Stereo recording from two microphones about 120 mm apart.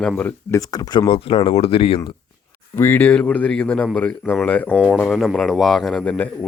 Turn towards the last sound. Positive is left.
turn(degrees=0)  # may be behind; listen again after turning